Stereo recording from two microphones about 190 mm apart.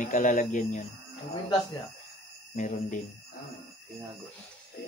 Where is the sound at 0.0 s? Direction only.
40° left (ahead or behind).